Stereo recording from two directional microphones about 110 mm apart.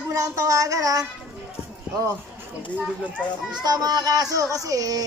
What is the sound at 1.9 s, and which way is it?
Music, 10° right (ahead or behind).